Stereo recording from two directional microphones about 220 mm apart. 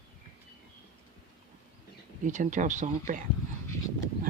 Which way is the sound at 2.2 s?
35° right (ahead or behind).